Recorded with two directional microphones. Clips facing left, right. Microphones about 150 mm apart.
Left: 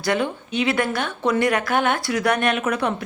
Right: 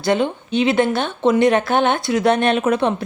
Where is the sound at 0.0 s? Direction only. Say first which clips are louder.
Right 4 dB; 25° right (ahead or behind).